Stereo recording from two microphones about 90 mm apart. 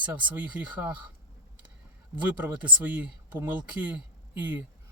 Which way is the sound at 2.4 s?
15° right (ahead or behind).